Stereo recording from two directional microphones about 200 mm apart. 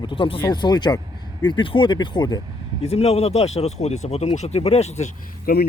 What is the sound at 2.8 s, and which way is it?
Speech, 30° left (ahead or behind).